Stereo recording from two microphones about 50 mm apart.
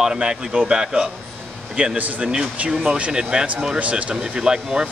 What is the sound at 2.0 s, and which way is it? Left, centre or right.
Speech, right.